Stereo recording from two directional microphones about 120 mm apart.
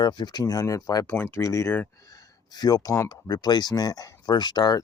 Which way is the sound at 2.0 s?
30° left (ahead or behind).